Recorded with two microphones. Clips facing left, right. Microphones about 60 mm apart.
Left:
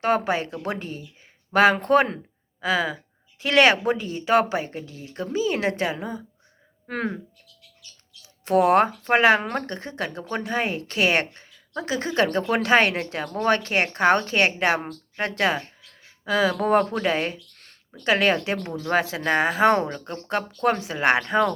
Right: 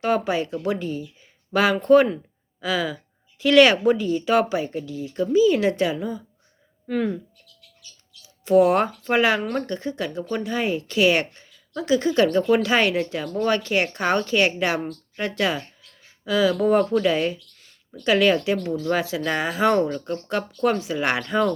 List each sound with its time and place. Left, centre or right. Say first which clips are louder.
0.0 s speech: even; left
8.4 s speech: right 1 dB; left
17.5 s a sound: left 3 dB; left
17.9 s speech: right 2 dB; left